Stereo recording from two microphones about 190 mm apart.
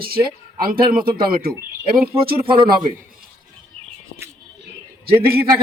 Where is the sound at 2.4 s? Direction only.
25° right (ahead or behind).